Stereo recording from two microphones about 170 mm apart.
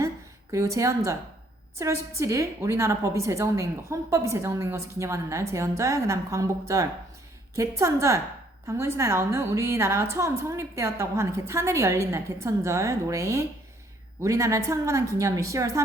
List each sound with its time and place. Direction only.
0.5 s a woman's voice: 20° right (ahead or behind)